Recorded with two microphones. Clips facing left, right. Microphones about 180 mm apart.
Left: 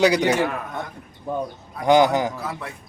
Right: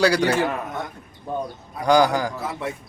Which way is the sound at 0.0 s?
20° left (ahead or behind).